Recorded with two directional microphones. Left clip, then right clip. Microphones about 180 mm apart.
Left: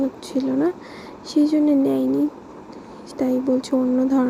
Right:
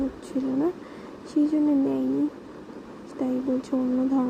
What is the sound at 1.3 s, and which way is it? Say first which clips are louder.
Speech: left 5 dB; 20° left (ahead or behind).